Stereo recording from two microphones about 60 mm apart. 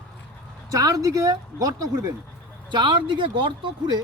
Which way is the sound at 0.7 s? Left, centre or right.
Right.